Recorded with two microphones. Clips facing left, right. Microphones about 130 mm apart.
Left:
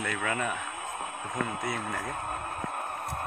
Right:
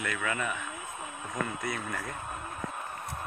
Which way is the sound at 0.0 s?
35° left (ahead or behind).